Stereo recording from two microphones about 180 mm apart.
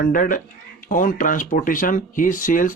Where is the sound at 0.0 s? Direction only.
50° left (ahead or behind).